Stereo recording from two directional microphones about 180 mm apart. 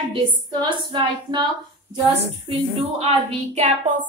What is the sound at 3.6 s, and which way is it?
Speech, 45° right (ahead or behind).